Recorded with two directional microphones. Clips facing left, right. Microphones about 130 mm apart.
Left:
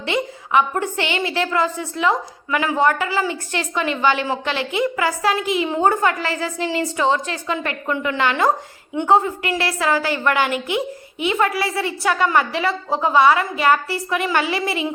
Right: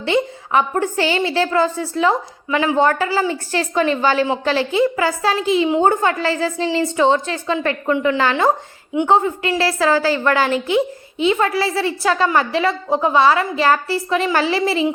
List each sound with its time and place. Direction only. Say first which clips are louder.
0.0 s a woman's voice: right 4 dB; 30° right (ahead or behind)